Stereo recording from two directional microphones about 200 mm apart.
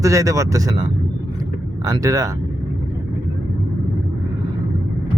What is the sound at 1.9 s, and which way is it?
Speech, 20° right (ahead or behind).